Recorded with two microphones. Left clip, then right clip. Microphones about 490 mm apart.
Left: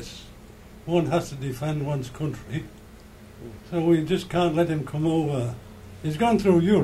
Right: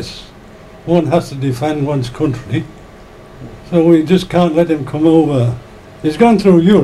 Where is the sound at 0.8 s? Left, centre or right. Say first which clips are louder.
Right 11 dB; centre.